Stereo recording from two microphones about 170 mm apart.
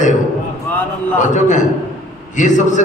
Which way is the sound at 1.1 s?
45° left (ahead or behind).